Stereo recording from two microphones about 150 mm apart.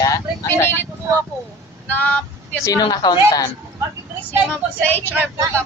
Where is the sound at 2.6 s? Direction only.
25° left (ahead or behind).